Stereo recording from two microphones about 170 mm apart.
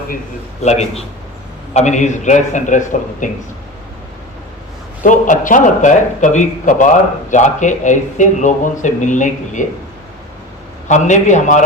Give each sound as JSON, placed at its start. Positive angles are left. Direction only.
{"t": 0.6, "sound": "a man's voice", "side_deg": 40}
{"t": 5.0, "sound": "speech", "side_deg": 50}
{"t": 10.8, "sound": "speech", "side_deg": 45}